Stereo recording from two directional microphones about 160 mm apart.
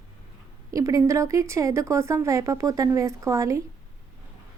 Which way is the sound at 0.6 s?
20° right (ahead or behind).